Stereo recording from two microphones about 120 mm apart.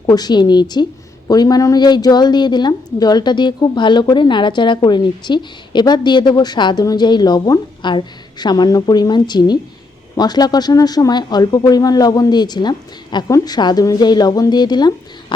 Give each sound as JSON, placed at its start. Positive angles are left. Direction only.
{"t": 0.0, "sound": "a woman's voice", "side_deg": 35}